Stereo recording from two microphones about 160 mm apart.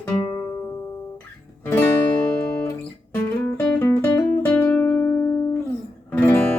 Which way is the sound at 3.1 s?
15° left (ahead or behind).